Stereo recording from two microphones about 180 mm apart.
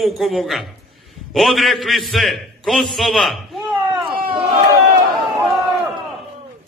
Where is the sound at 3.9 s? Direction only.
25° right (ahead or behind).